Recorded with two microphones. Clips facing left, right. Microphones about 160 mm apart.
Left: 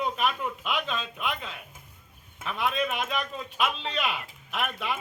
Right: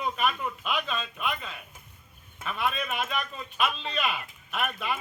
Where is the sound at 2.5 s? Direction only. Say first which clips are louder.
Left 2 dB; 15° left (ahead or behind).